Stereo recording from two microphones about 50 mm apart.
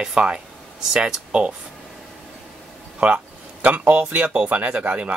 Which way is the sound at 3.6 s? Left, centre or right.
Right.